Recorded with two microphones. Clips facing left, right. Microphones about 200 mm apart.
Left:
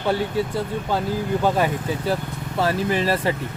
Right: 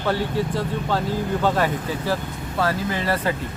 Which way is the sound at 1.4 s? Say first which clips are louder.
Left 1 dB; 15° left (ahead or behind).